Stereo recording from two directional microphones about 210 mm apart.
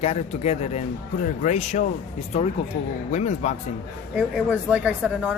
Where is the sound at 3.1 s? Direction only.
35° left (ahead or behind).